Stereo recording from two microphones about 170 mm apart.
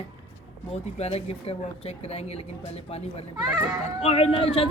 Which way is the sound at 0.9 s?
35° left (ahead or behind).